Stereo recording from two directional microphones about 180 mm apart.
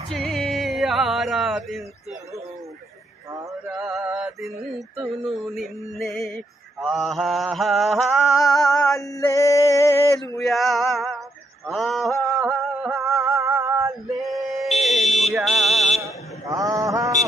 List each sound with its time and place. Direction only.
0.1 s music: centre (ahead or behind)
3.6 s music: 5° right (ahead or behind)
9.0 s male singing: 20° left (ahead or behind)
10.4 s male singing: centre (ahead or behind)
11.6 s a sound: centre (ahead or behind)
13.3 s music: 15° right (ahead or behind)
14.1 s male singing: centre (ahead or behind)
14.8 s fire alarm: centre (ahead or behind)
15.3 s a sound: centre (ahead or behind)
16.4 s mantra: 20° right (ahead or behind)